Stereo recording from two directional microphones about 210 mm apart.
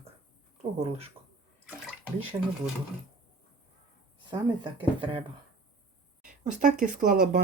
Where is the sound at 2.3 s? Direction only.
15° right (ahead or behind).